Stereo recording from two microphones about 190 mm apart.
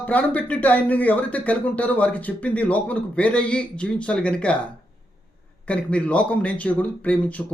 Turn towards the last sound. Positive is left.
turn(degrees=5)  # may be behind; listen again after turning